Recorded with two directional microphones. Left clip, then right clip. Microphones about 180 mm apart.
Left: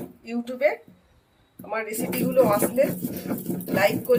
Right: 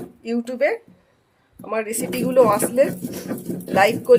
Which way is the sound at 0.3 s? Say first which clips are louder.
Right 3 dB; 65° right (ahead or behind).